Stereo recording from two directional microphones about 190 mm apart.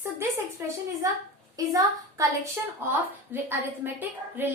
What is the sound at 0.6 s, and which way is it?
A woman's voice, 10° right (ahead or behind).